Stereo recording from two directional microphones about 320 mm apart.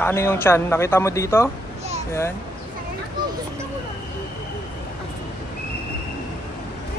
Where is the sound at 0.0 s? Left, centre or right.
Centre.